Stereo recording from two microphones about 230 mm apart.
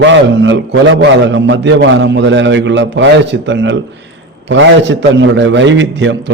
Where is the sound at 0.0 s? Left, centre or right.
Right.